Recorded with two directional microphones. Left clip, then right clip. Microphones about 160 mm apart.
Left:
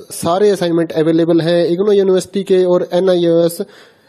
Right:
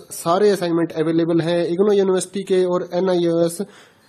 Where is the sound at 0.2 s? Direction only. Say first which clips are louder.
Left 4 dB; 40° left (ahead or behind).